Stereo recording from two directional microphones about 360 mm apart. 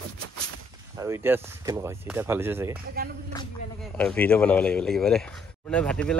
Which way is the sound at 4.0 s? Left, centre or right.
Centre.